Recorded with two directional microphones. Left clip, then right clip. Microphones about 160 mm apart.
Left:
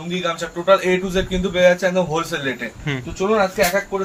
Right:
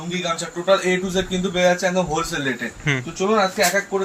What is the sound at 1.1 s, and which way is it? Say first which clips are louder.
Speech: left 2 dB; 30° left (ahead or behind).